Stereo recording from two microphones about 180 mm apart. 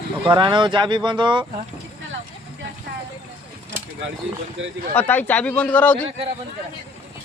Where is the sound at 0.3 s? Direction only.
25° right (ahead or behind).